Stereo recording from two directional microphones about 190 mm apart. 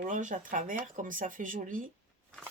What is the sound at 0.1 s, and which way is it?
Speech, 45° right (ahead or behind).